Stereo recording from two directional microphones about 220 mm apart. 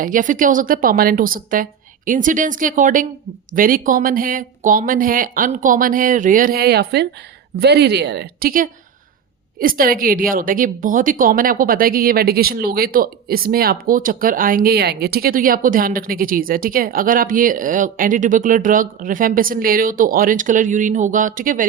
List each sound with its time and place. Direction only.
0.0 s a woman's voice: 35° right (ahead or behind)